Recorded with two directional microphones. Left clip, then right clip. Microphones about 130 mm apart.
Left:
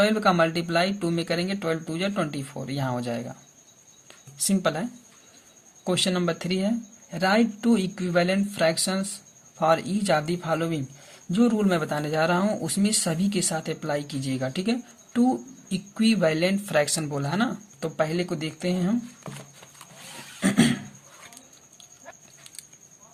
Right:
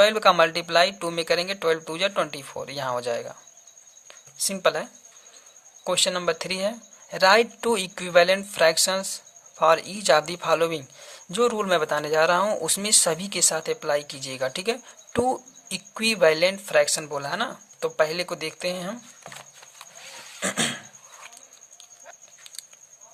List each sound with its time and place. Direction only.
0.0 s speech: 40° right (ahead or behind)
4.4 s speech: 30° right (ahead or behind)
4.6 s speech: 40° right (ahead or behind)
20.4 s a sound: 35° right (ahead or behind)